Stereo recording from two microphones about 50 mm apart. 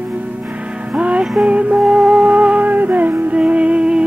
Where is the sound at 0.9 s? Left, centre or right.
Right.